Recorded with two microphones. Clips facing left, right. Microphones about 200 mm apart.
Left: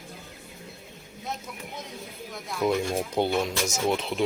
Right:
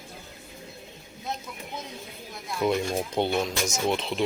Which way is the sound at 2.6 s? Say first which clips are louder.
Even; centre (ahead or behind).